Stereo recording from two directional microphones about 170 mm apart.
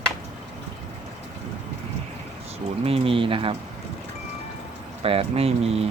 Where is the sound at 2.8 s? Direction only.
35° right (ahead or behind).